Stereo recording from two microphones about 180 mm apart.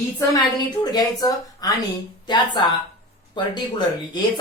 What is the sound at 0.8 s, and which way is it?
Speech, 20° left (ahead or behind).